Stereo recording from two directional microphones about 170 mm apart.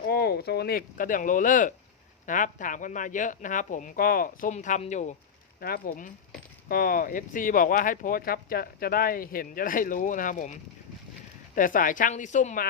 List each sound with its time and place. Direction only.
0.1 s speech: 70° left (ahead or behind); by 5.1 s 45° left (ahead or behind)
5.5 s speech: 60° left (ahead or behind)